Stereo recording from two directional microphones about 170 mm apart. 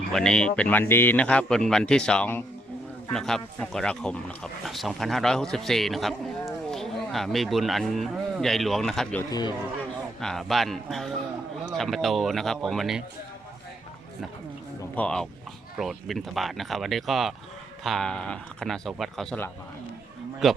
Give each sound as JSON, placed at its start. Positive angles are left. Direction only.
{"t": 0.1, "sound": "a man's voice", "side_deg": 5}
{"t": 14.9, "sound": "speech", "side_deg": 5}